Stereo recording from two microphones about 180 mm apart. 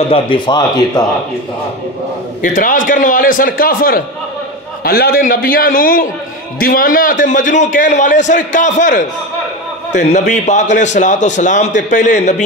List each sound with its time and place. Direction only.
0.1 s speech: 25° left (ahead or behind)
2.4 s a man's voice: 45° left (ahead or behind)